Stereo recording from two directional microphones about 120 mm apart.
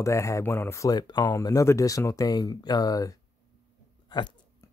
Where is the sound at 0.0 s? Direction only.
25° left (ahead or behind).